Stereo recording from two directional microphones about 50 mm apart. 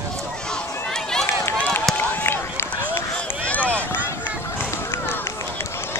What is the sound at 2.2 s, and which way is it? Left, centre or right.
Run, left.